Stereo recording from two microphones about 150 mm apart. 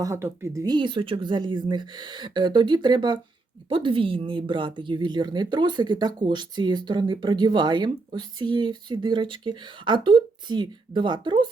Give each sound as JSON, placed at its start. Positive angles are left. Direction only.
{"t": 0.0, "sound": "a woman's voice", "side_deg": -20}